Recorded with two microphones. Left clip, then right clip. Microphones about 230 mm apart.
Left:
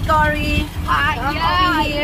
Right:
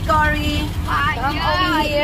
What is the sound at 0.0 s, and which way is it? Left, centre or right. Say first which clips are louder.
Speech: left 1 dB; centre.